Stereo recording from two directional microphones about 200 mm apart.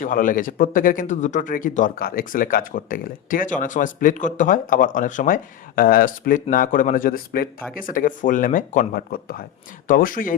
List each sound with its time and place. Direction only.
0.0 s speech: 40° left (ahead or behind)